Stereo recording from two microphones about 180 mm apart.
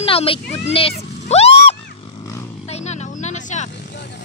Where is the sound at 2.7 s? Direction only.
40° left (ahead or behind).